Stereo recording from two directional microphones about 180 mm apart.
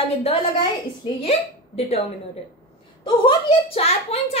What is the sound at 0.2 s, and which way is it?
Speech, 35° left (ahead or behind).